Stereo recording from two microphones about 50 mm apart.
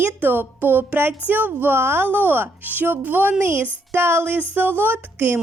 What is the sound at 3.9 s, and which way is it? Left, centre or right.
Speech, right.